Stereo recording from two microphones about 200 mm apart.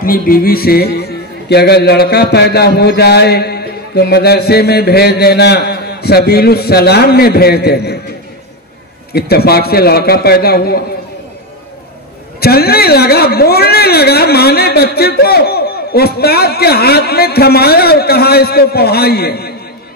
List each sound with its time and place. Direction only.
0.0 s a man's voice: 45° left (ahead or behind)
9.1 s a man's voice: 50° left (ahead or behind)
12.4 s a man's voice: 50° left (ahead or behind)